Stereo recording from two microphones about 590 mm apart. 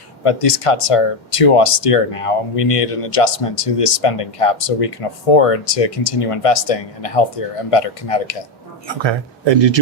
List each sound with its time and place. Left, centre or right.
0.3 s speech: left
8.9 s speech: right